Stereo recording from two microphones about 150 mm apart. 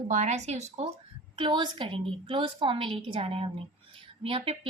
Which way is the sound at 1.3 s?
30° right (ahead or behind).